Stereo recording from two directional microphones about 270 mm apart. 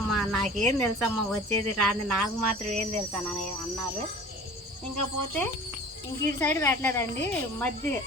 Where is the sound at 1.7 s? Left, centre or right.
Right.